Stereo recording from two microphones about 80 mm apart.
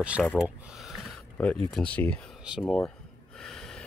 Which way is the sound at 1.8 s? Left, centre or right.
Centre.